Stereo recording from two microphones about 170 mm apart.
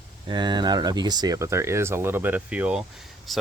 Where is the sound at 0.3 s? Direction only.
25° right (ahead or behind).